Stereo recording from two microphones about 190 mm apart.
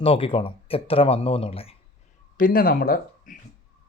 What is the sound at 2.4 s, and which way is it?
Speech, 50° left (ahead or behind).